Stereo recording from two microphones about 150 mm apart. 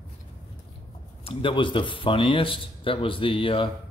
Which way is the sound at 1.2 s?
35° left (ahead or behind).